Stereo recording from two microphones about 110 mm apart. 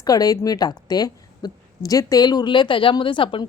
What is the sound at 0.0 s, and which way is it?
A woman's voice, 35° left (ahead or behind).